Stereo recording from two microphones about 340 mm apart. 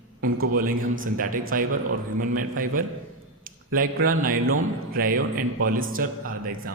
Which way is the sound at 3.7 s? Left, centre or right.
Right.